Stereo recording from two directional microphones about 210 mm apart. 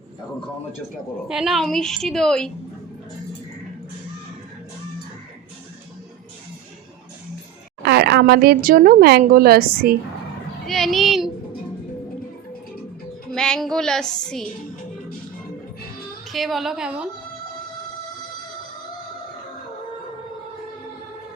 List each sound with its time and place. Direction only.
1.3 s a woman's voice: centre (ahead or behind)
7.9 s a woman's voice: 50° right (ahead or behind)
10.7 s speech: centre (ahead or behind)
13.3 s a woman's voice: 5° left (ahead or behind)
16.3 s a woman's voice: centre (ahead or behind)